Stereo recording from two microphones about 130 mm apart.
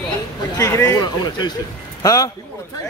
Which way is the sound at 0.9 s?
30° left (ahead or behind).